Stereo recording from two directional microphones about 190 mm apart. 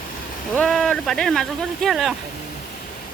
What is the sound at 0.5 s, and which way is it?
Speech, 5° left (ahead or behind).